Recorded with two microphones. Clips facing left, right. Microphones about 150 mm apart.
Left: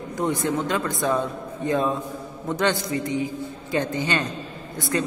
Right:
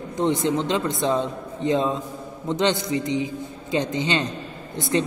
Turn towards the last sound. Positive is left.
turn(degrees=-25)  # may be behind; listen again after turning